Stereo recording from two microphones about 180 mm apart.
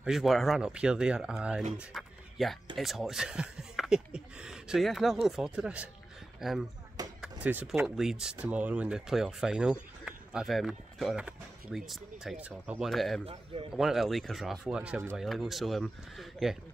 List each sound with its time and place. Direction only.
0.0 s speech: centre (ahead or behind)
1.8 s a sound: centre (ahead or behind)
2.8 s speech: centre (ahead or behind)
13.2 s speech: 30° right (ahead or behind)
13.7 s speech: centre (ahead or behind)